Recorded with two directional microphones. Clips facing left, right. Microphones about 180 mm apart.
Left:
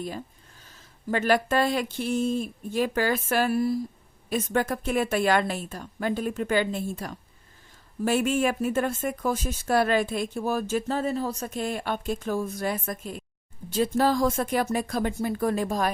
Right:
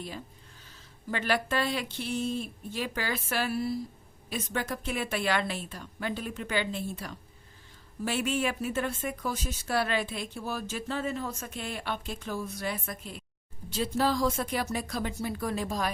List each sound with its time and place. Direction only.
1.1 s speech: 45° left (ahead or behind)